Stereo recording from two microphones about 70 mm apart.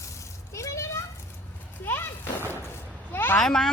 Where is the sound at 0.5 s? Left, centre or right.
Left.